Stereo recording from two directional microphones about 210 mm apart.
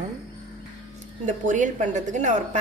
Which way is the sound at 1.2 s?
35° right (ahead or behind).